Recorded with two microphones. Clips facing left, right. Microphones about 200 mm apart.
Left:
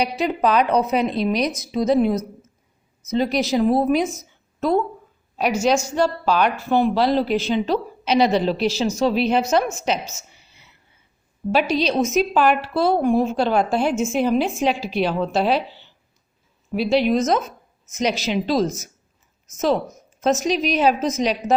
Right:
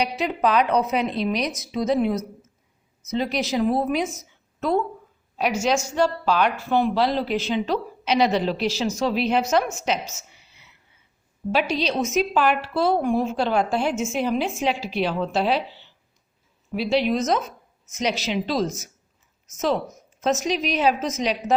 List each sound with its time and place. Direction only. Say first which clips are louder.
0.0 s speech: left 2 dB; 40° left (ahead or behind)
5.6 s a woman's voice: left 2 dB; 35° left (ahead or behind)
11.5 s a woman's voice: left 4 dB; 40° left (ahead or behind)
16.7 s a woman's voice: left 3 dB; 45° left (ahead or behind)